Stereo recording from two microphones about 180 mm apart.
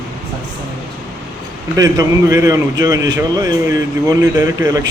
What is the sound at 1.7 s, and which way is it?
A man's voice, 20° right (ahead or behind).